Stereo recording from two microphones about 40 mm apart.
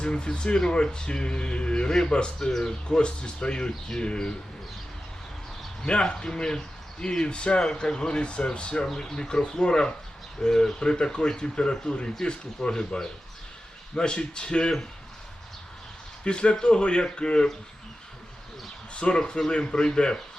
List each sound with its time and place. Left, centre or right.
0.0 s speech: left
2.4 s speech: centre
5.8 s speech: left
8.9 s speech: centre
16.2 s speech: left
18.9 s speech: left